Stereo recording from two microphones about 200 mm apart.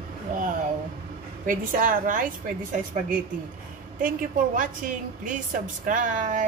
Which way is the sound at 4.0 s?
45° right (ahead or behind).